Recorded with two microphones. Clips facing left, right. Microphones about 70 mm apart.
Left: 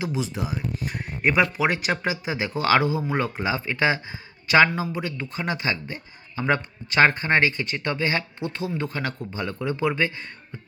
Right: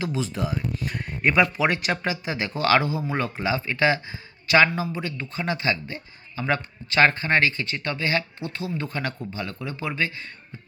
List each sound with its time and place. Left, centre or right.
0.0 s a man's voice: centre; by 10.1 s left